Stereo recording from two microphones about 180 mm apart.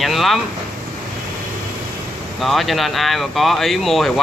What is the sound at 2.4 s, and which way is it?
Speech, centre (ahead or behind).